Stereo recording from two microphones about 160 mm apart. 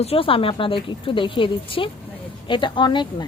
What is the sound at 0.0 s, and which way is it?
A woman's voice, 35° left (ahead or behind).